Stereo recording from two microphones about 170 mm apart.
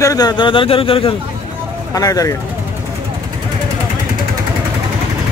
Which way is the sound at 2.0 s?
20° left (ahead or behind).